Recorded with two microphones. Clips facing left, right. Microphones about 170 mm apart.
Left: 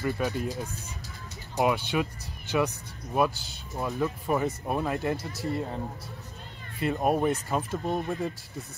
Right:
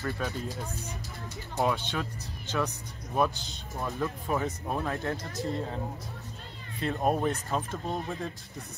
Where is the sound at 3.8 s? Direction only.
5° left (ahead or behind).